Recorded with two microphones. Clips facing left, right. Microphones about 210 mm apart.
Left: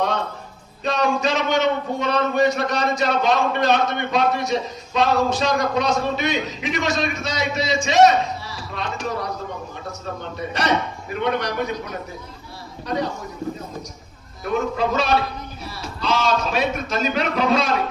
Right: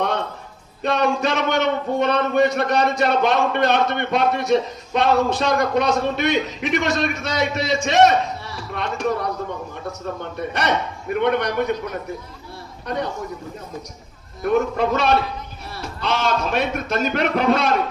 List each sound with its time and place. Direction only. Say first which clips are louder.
0.9 s a man's voice: right 1 dB; 60° right (ahead or behind)
11.1 s a man's voice: right 4 dB; 55° right (ahead or behind)
14.4 s a man's voice: right 3 dB; 60° right (ahead or behind)